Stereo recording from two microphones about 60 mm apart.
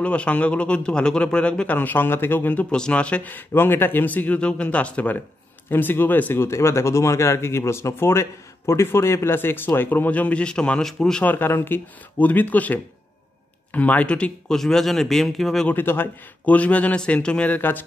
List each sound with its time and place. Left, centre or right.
0.0 s a man's voice: centre
1.7 s speech: left
2.7 s speech: centre
3.3 s speech: left
5.7 s speech: left
6.4 s a man's voice: left; by 11.2 s centre
11.2 s speech: left; by 14.6 s centre
14.6 s a man's voice: centre
15.7 s speech: left
16.4 s speech: left
17.5 s speech: left